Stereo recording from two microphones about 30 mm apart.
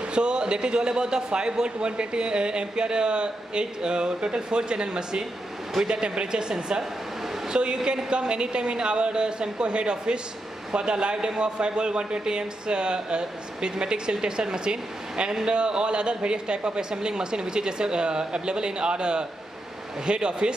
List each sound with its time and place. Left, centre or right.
0.1 s a man's voice: right
7.5 s a woman's voice: right